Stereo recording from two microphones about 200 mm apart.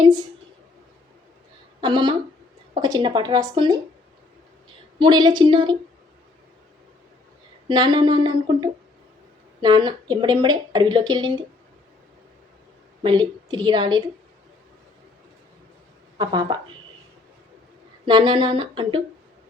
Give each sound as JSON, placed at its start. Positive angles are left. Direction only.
{"t": 1.8, "sound": "speech", "side_deg": -25}
{"t": 4.9, "sound": "speech", "side_deg": -20}
{"t": 7.7, "sound": "speech", "side_deg": -20}
{"t": 13.0, "sound": "speech", "side_deg": -20}
{"t": 16.1, "sound": "speech", "side_deg": -20}
{"t": 18.0, "sound": "speech", "side_deg": -25}